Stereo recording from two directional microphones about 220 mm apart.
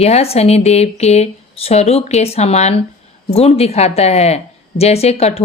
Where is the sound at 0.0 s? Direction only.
30° left (ahead or behind).